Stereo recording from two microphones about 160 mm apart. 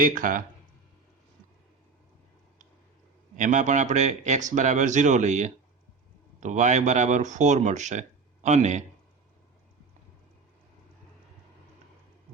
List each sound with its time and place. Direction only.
0.0 s speech: 55° right (ahead or behind)
3.3 s speech: 50° right (ahead or behind)